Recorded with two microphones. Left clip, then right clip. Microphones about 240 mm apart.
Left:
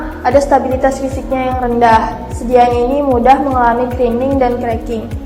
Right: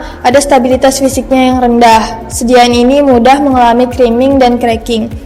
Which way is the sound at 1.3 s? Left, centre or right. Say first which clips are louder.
Right 6 dB; right.